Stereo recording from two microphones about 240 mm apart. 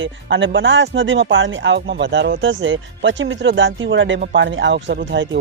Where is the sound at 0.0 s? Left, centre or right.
Right.